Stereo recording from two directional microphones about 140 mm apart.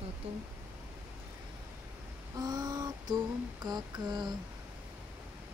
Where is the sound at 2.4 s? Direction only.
30° right (ahead or behind).